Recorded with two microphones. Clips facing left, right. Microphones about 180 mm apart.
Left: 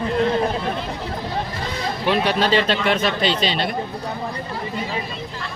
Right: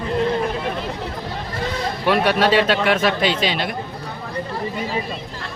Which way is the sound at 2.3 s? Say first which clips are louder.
Right 2 dB; 5° right (ahead or behind).